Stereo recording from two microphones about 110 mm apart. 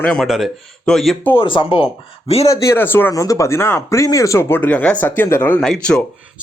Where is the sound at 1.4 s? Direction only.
50° left (ahead or behind).